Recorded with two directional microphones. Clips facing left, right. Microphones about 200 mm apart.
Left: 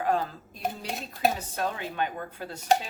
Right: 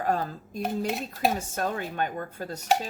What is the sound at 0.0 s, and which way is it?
Speech, 45° right (ahead or behind).